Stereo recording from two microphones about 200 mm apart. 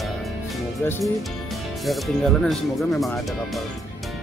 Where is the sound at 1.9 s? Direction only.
Centre (ahead or behind).